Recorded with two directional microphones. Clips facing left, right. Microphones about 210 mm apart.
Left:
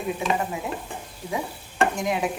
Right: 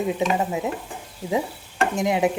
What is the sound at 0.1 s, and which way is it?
Speech, 20° right (ahead or behind).